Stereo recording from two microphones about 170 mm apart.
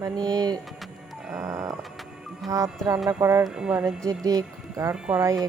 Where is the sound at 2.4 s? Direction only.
Centre (ahead or behind).